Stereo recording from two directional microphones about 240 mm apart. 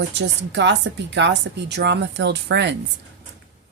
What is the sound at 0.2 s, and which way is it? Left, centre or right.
Speech, right.